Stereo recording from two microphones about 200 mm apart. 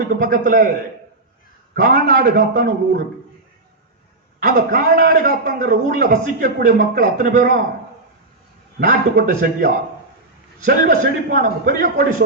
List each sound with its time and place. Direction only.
0.1 s a man's voice: 45° right (ahead or behind)
1.7 s a man's voice: 50° right (ahead or behind)
4.4 s a man's voice: 45° right (ahead or behind)
8.8 s a man's voice: 45° right (ahead or behind)